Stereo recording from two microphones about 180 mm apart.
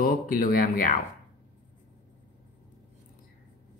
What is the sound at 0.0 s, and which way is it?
Speech, 50° left (ahead or behind).